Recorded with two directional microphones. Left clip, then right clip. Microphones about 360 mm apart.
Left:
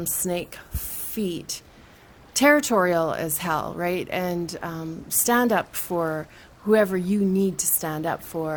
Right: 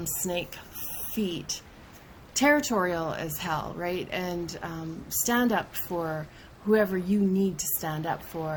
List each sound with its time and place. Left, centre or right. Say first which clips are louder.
0.3 s speech: left 3 dB; left